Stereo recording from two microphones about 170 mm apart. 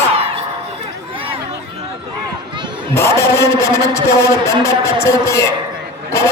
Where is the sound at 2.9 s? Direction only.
15° left (ahead or behind).